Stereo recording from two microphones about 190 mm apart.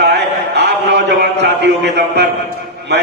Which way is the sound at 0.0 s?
60° right (ahead or behind).